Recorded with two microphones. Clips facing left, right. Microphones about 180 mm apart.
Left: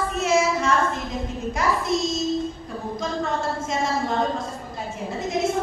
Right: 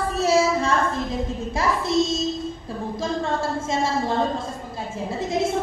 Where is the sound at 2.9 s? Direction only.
30° right (ahead or behind).